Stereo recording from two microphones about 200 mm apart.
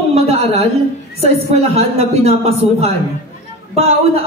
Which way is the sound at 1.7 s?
30° right (ahead or behind).